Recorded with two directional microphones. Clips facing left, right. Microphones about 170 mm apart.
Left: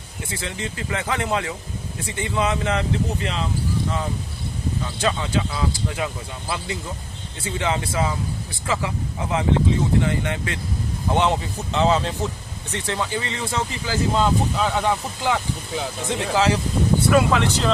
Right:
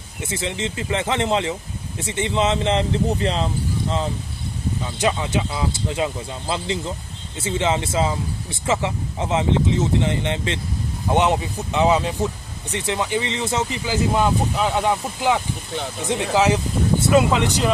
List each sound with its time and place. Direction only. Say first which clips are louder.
0.2 s speech: right 4 dB; 20° right (ahead or behind)
4.9 s speech: right 2 dB; 20° right (ahead or behind)